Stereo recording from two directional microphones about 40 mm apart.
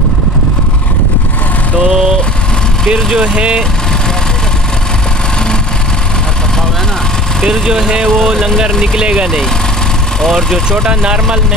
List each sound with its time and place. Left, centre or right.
1.9 s vehicle: centre
3.2 s speech: right
7.4 s speech: centre
10.7 s speech: right